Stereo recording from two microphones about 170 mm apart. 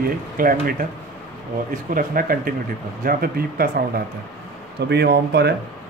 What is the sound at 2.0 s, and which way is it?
Speech, 55° right (ahead or behind).